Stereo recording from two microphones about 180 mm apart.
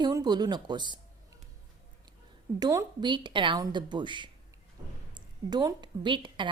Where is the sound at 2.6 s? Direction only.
20° right (ahead or behind).